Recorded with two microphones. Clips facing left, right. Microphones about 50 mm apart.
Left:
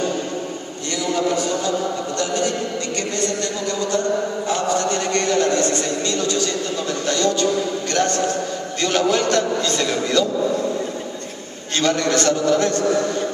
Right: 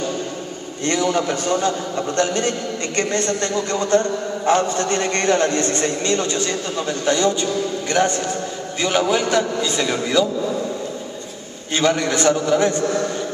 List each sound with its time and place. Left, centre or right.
0.8 s a man's voice: right; by 10.2 s centre
11.8 s a man's voice: centre